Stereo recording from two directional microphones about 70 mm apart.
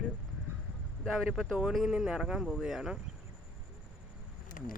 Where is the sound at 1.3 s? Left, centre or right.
Centre.